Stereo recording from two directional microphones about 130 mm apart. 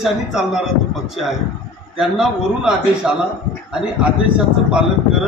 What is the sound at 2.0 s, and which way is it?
A man's voice, 5° right (ahead or behind).